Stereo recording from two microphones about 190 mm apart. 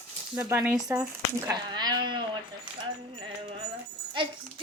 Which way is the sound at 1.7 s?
20° right (ahead or behind).